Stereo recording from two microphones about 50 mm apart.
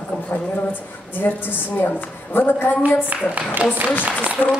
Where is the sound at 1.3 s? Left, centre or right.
Left.